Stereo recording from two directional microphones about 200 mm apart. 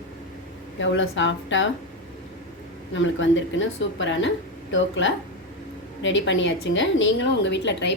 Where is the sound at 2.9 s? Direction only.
70° left (ahead or behind).